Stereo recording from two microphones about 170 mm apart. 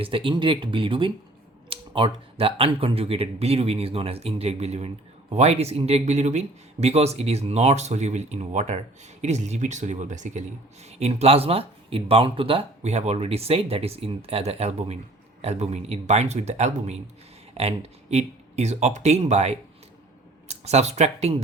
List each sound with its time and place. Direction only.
0.0 s speech: 30° right (ahead or behind)